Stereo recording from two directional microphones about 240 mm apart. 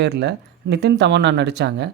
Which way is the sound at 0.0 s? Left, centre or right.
Right.